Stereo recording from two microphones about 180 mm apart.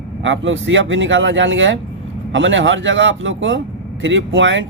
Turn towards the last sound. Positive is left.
turn(degrees=-90)